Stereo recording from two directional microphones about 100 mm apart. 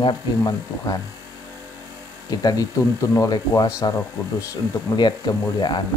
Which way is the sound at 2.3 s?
40° left (ahead or behind).